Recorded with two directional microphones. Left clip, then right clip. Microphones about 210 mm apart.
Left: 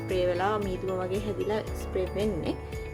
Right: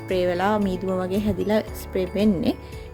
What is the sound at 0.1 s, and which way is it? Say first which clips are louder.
Speech: right 5 dB; 40° right (ahead or behind).